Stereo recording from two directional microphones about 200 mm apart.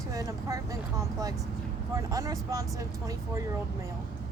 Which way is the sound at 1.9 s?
15° right (ahead or behind).